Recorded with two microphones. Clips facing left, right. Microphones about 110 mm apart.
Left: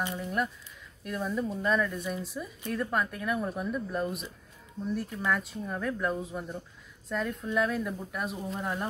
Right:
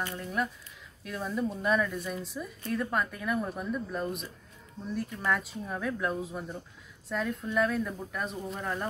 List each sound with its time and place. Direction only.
0.0 s speech: 15° left (ahead or behind)
1.0 s speech: centre (ahead or behind)